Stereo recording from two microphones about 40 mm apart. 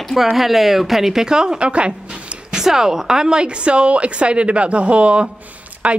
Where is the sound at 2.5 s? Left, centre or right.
Centre.